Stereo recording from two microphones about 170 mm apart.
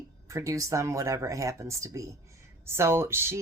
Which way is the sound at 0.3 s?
20° right (ahead or behind).